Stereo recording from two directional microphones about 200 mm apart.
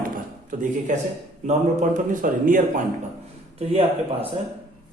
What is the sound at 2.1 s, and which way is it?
Speech, 40° right (ahead or behind).